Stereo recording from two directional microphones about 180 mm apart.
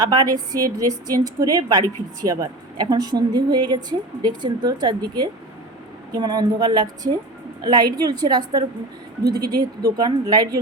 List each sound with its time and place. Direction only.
0.0 s a woman's voice: 25° right (ahead or behind)